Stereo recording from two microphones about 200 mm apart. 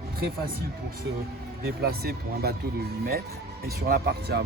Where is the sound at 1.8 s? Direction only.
50° right (ahead or behind).